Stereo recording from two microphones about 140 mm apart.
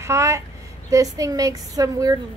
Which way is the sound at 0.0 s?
20° right (ahead or behind).